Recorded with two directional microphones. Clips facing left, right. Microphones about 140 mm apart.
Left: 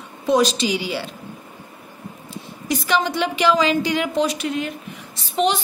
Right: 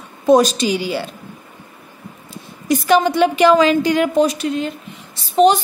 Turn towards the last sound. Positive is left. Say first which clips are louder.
# right 8 dB
turn(degrees=-40)  # may be behind; listen again after turning